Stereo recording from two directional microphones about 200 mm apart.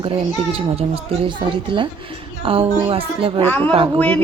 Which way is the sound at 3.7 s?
25° right (ahead or behind).